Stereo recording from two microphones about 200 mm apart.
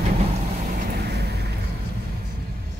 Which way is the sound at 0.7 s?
45° right (ahead or behind).